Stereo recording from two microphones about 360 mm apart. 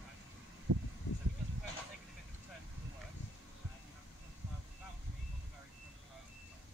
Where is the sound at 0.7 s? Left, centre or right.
Right.